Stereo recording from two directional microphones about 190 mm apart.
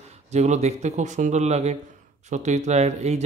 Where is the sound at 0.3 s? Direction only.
35° right (ahead or behind).